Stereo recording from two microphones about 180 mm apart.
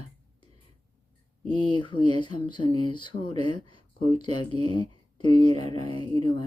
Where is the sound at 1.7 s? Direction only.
25° left (ahead or behind).